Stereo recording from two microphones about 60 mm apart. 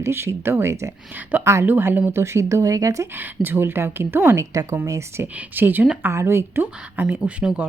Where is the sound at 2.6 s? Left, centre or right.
Right.